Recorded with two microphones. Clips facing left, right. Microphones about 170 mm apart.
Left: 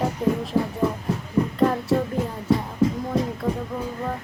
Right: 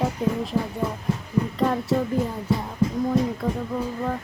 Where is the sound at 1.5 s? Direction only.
Centre (ahead or behind).